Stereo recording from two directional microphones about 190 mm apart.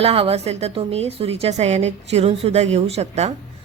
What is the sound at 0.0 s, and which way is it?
A woman's voice, 30° right (ahead or behind).